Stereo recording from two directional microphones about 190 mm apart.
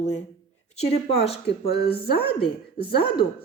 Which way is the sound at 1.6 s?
55° left (ahead or behind).